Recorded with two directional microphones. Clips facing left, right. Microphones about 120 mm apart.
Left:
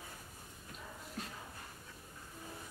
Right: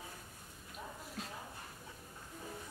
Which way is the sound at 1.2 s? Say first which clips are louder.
Left 1 dB; centre (ahead or behind).